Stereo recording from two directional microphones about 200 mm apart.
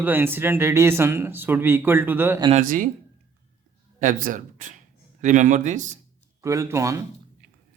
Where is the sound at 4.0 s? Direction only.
40° right (ahead or behind).